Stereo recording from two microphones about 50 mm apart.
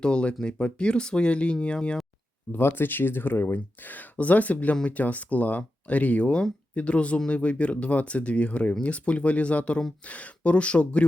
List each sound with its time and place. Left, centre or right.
0.0 s speech: centre
2.5 s speech: left